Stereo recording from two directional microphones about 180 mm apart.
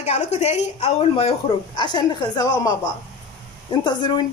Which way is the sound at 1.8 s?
25° left (ahead or behind).